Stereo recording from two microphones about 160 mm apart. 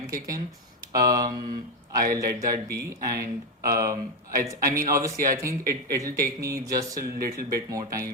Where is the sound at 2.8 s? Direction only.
20° right (ahead or behind).